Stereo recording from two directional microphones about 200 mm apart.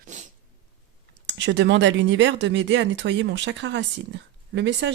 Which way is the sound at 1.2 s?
65° right (ahead or behind).